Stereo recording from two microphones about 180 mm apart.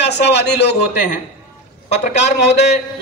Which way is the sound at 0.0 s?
70° left (ahead or behind).